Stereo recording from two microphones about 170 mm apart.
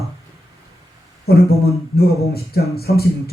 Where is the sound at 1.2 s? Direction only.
65° left (ahead or behind).